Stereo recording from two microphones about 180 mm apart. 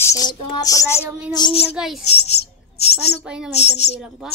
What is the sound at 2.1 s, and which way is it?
Bird, 35° left (ahead or behind).